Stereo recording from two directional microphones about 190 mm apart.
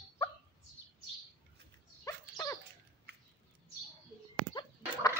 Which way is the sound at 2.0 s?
15° left (ahead or behind).